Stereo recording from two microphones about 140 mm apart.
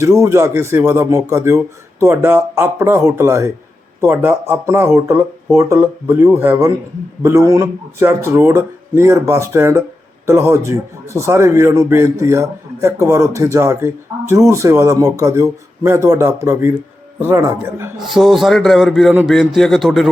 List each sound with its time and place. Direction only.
0.0 s speech: 20° right (ahead or behind)
18.0 s speech: centre (ahead or behind)